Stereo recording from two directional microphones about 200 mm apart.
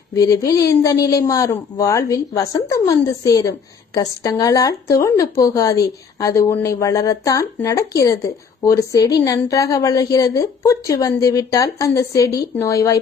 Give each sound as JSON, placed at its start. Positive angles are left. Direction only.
{"t": 0.1, "sound": "a woman's voice", "side_deg": 15}